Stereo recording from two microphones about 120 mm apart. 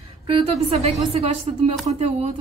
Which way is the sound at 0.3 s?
55° right (ahead or behind).